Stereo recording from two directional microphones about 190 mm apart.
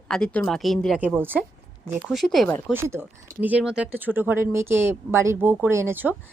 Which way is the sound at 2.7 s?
10° right (ahead or behind).